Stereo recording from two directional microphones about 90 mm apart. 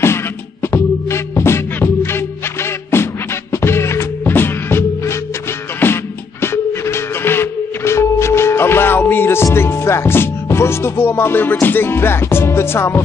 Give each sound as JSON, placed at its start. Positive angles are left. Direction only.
{"t": 0.0, "sound": "music", "side_deg": 30}